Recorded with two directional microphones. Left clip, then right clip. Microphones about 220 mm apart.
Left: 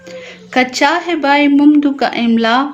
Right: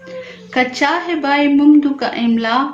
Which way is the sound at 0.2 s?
45° left (ahead or behind).